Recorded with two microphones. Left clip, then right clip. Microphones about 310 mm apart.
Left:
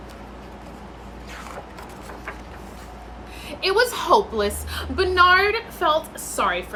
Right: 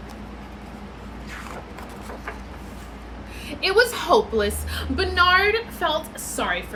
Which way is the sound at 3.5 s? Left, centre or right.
Centre.